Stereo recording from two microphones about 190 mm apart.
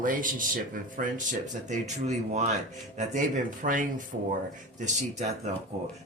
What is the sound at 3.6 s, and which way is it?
Speech, 45° right (ahead or behind).